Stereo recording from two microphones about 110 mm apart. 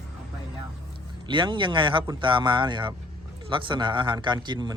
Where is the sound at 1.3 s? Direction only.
45° right (ahead or behind).